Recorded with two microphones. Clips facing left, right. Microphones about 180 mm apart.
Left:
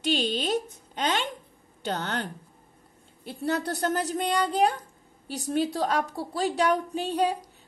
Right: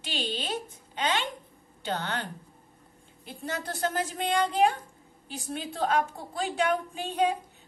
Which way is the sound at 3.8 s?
40° left (ahead or behind).